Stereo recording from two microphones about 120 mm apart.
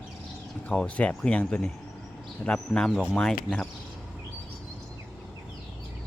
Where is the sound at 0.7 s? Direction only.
10° left (ahead or behind).